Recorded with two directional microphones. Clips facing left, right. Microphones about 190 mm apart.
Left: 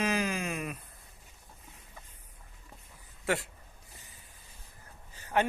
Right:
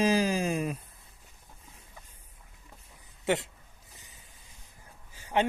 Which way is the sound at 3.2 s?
20° right (ahead or behind).